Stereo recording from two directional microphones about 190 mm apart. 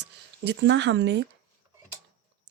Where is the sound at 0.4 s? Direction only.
70° right (ahead or behind).